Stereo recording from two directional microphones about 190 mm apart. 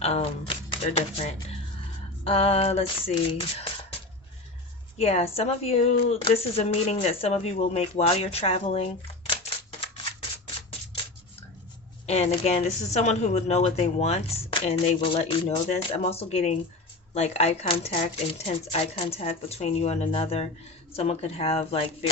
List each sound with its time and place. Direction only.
0.0 s a woman's voice: 30° left (ahead or behind)
4.9 s a woman's voice: 35° left (ahead or behind)
9.3 s typewriter: 30° left (ahead or behind)
12.0 s a woman's voice: 35° left (ahead or behind)